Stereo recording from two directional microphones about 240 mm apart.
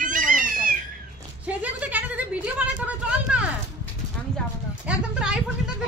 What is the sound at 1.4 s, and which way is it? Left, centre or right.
A woman's voice, centre.